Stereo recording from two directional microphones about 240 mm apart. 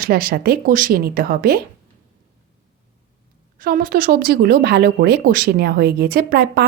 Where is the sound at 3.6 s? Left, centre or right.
Right.